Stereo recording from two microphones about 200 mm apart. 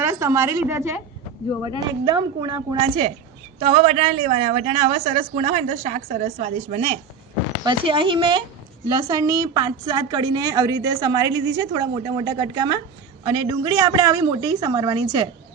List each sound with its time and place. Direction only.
0.0 s a woman's voice: 15° right (ahead or behind)